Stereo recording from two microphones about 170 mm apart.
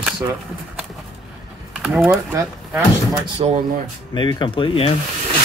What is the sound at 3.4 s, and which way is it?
Speech, 35° right (ahead or behind).